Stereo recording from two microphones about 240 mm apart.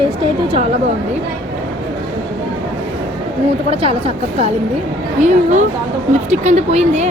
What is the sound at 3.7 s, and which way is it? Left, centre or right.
Speech, right.